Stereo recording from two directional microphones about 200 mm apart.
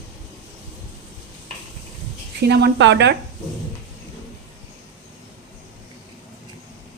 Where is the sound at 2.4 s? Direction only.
55° right (ahead or behind).